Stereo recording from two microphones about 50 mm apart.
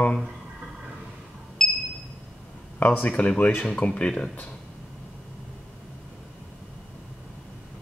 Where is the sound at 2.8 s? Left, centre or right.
Left.